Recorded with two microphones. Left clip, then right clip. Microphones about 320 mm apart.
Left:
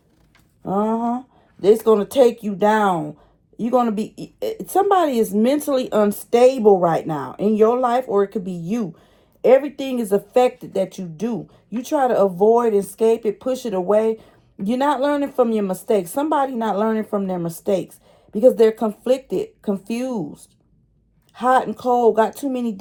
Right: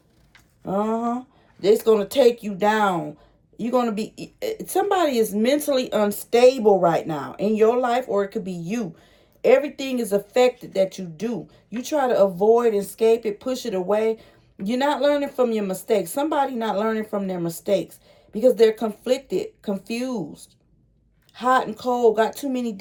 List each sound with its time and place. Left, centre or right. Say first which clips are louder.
0.6 s speech: left 3 dB; centre